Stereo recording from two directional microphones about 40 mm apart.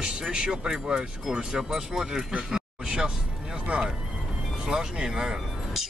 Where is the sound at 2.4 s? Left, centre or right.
Centre.